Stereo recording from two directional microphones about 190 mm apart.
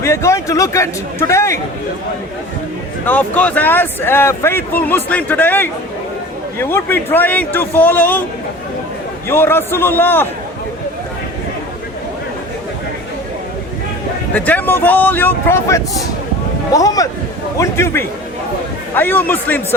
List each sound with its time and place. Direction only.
0.0 s speech: 15° left (ahead or behind)
3.1 s speech: 10° left (ahead or behind)
9.3 s speech: 10° left (ahead or behind)
14.3 s speech: 10° left (ahead or behind)